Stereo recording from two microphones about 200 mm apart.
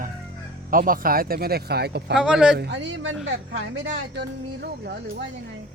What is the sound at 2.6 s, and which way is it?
A man's voice, 60° right (ahead or behind).